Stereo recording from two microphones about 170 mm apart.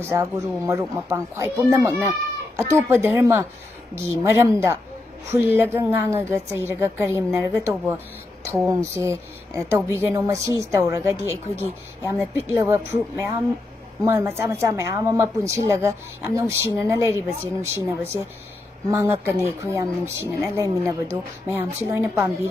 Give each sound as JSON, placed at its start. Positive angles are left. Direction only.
{"t": 0.0, "sound": "a woman's voice", "side_deg": -15}